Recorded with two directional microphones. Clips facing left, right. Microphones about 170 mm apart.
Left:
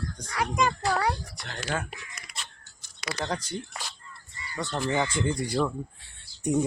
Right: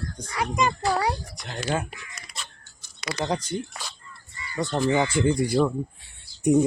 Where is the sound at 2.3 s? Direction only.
25° right (ahead or behind).